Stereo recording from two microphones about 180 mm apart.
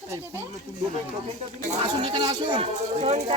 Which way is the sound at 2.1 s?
25° right (ahead or behind).